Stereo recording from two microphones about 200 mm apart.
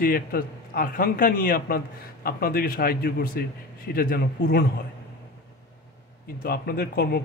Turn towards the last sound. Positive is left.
turn(degrees=50)  # may be behind; listen again after turning